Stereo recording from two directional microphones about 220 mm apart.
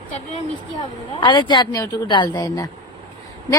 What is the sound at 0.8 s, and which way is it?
Speech, 20° left (ahead or behind).